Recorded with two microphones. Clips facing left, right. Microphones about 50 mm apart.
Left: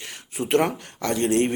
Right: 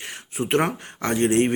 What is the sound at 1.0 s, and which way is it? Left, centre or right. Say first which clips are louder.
Speech: right 2 dB; right.